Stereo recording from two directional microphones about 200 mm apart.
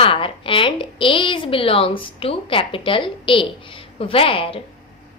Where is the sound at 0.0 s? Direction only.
25° left (ahead or behind).